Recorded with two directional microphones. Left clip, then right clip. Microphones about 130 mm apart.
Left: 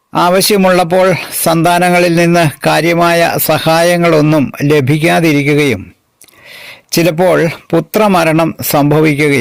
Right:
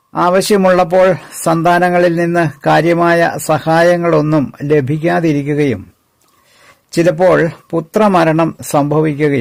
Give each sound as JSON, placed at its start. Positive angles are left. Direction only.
{"t": 0.1, "sound": "speech", "side_deg": 25}
{"t": 6.9, "sound": "speech", "side_deg": 30}